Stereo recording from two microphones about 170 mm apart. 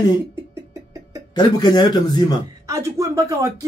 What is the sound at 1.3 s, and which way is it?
Speech, 25° left (ahead or behind).